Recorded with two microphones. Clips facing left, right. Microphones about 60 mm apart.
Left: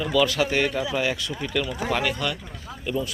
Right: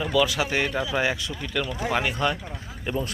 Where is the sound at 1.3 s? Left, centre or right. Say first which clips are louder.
Left 3 dB; centre.